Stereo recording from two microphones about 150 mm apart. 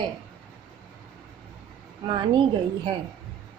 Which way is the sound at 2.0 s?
30° right (ahead or behind).